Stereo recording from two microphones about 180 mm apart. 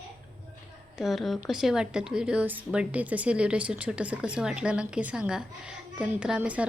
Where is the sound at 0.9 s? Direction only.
Centre (ahead or behind).